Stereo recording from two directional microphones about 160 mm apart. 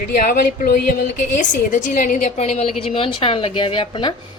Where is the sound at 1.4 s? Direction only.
50° left (ahead or behind).